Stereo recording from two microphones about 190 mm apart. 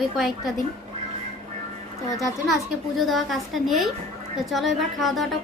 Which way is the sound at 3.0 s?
Centre (ahead or behind).